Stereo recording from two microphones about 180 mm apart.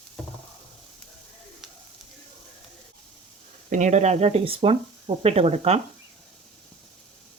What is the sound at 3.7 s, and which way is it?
Speech, 40° right (ahead or behind).